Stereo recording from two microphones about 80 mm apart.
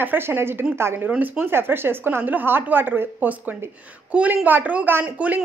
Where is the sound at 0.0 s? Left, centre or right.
Right.